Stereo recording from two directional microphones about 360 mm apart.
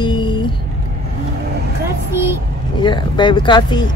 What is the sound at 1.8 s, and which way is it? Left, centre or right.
Vehicle, centre.